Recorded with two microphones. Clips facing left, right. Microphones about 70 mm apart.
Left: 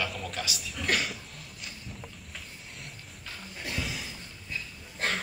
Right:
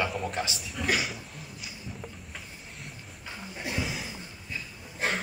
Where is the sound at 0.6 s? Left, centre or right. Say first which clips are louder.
Left 1 dB; centre.